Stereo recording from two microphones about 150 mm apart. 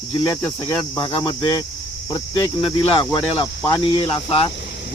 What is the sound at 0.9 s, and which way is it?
Speech, 35° left (ahead or behind).